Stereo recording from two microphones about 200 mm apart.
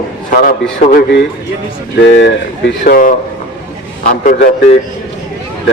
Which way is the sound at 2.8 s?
40° left (ahead or behind).